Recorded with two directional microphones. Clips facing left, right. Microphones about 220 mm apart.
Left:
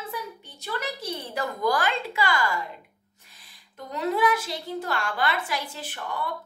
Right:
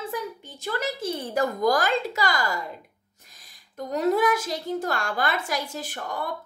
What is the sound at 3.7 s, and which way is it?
A woman's voice, 45° right (ahead or behind).